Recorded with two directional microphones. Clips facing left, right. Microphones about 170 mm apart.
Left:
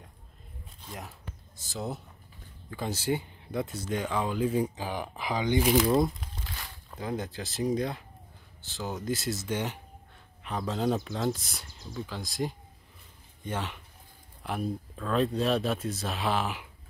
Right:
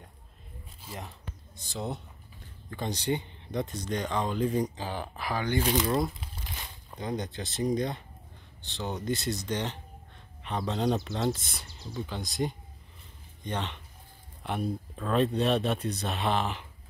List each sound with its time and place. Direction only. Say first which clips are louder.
0.8 s speech: right 1 dB; centre (ahead or behind); by 5.7 s 15° left (ahead or behind)
5.7 s speech: left 6 dB; 5° left (ahead or behind)
6.4 s a sound: even; 20° right (ahead or behind)
7.0 s speech: even; 5° left (ahead or behind)